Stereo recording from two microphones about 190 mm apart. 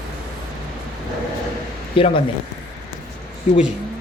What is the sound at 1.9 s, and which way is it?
Speech, 30° left (ahead or behind).